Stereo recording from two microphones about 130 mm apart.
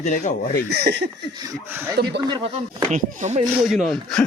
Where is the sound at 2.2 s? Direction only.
35° right (ahead or behind).